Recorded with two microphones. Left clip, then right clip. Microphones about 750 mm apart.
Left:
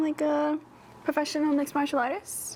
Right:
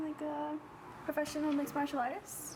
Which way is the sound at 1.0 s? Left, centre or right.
Left.